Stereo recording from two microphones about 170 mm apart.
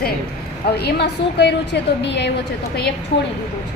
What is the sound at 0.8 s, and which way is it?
A woman's voice, 75° left (ahead or behind).